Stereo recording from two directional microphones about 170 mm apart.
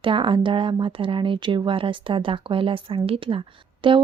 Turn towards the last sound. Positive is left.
turn(degrees=-30)  # may be behind; listen again after turning